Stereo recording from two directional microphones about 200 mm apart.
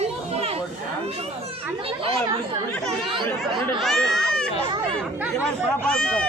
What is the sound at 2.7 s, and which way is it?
Speech, 5° left (ahead or behind).